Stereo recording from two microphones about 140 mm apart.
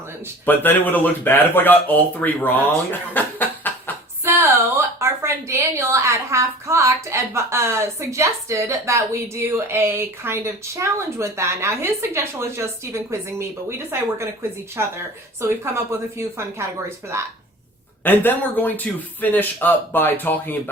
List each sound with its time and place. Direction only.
0.4 s speech: 15° left (ahead or behind)
3.2 s a sound: 15° left (ahead or behind)
4.3 s a sound: 20° right (ahead or behind)
4.9 s a woman's voice: 20° right (ahead or behind)
14.8 s a woman's voice: 20° right (ahead or behind)
18.0 s speech: 15° left (ahead or behind)